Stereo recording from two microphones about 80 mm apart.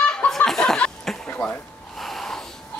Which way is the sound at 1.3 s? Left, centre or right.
Centre.